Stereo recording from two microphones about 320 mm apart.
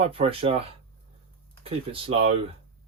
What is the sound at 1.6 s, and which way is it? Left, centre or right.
Speech, centre.